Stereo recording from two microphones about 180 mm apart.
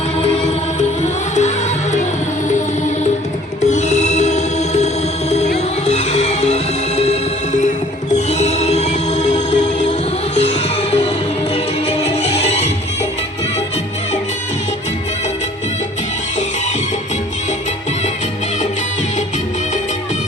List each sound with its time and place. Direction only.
0.2 s music: 40° left (ahead or behind)
3.7 s music: 40° left (ahead or behind)
10.3 s music: 35° left (ahead or behind)